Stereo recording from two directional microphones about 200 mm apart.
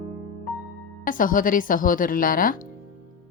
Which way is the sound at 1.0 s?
45° left (ahead or behind).